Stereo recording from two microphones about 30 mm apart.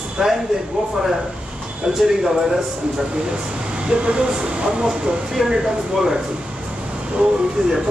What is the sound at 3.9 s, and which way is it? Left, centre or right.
Speech, right.